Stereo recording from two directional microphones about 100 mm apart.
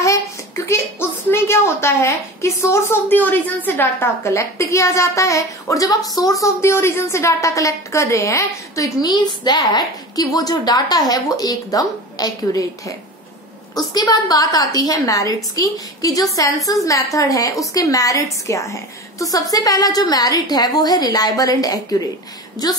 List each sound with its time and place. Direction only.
0.7 s a woman's voice: 25° left (ahead or behind)
9.1 s a woman's voice: 45° left (ahead or behind)